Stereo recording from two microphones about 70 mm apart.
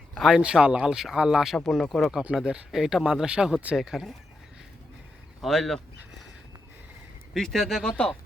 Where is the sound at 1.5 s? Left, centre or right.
Centre.